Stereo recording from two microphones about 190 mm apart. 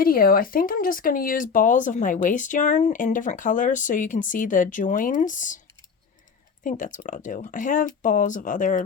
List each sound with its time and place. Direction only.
0.0 s speech: 50° left (ahead or behind)
6.7 s speech: 45° left (ahead or behind)